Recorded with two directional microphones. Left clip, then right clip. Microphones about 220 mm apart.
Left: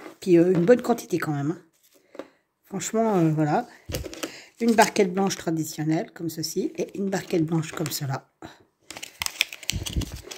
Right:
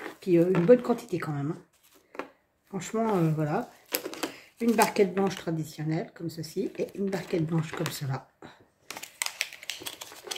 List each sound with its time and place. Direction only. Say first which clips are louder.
0.2 s speech: left 5 dB; 45° left (ahead or behind)
2.7 s speech: left 5 dB; 45° left (ahead or behind)
9.2 s typing: left 7 dB; 35° left (ahead or behind)